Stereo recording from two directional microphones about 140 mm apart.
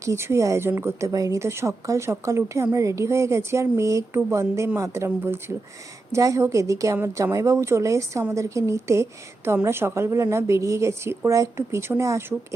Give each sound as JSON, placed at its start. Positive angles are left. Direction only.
{"t": 0.0, "sound": "a woman's voice", "side_deg": -20}